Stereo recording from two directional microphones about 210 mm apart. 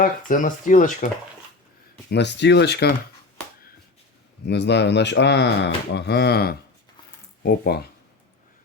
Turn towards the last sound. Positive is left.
turn(degrees=50)  # may be behind; listen again after turning